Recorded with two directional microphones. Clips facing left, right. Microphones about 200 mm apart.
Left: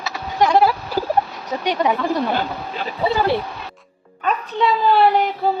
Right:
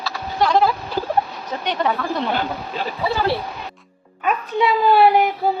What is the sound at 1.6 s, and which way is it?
Speech, 10° left (ahead or behind).